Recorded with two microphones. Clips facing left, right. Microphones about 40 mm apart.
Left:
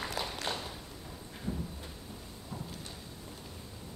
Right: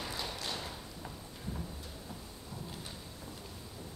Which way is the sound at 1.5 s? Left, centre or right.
Left.